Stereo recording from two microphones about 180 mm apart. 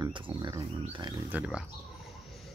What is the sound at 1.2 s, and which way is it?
Speech, 5° right (ahead or behind).